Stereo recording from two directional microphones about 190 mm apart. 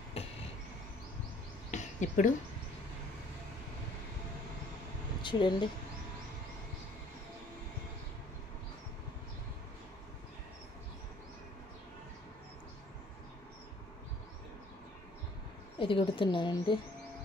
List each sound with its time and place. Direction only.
0.2 s vehicle: 30° left (ahead or behind)
1.7 s a sound: 40° left (ahead or behind)
5.2 s speech: 25° left (ahead or behind)
15.8 s a woman's voice: 25° left (ahead or behind)